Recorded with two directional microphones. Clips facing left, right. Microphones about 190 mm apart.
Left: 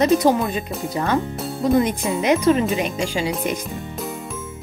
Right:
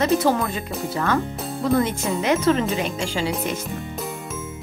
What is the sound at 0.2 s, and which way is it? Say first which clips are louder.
Speech: left 3 dB; 15° left (ahead or behind).